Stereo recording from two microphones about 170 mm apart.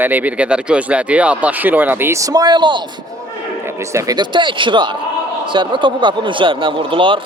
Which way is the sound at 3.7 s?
15° right (ahead or behind).